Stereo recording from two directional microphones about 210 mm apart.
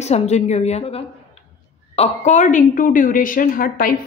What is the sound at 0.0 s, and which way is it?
A woman's voice, 30° left (ahead or behind).